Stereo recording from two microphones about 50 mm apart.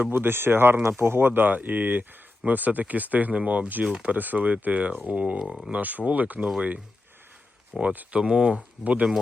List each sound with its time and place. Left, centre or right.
0.0 s speech: right
7.8 s speech: right